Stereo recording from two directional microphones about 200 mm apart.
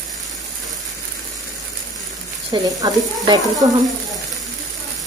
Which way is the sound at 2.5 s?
20° right (ahead or behind).